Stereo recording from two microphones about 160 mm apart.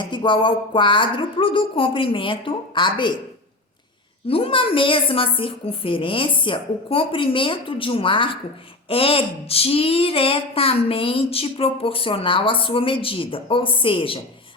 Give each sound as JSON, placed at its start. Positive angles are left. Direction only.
{"t": 0.0, "sound": "speech", "side_deg": 30}
{"t": 4.3, "sound": "speech", "side_deg": 35}